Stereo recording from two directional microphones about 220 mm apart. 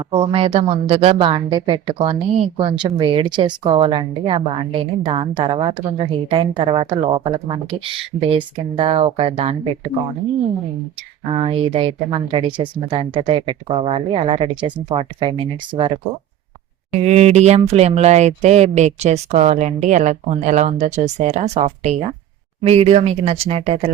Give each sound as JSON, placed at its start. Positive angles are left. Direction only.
{"t": 0.1, "sound": "a woman's voice", "side_deg": -25}
{"t": 11.3, "sound": "a woman's voice", "side_deg": -25}
{"t": 16.9, "sound": "a woman's voice", "side_deg": -30}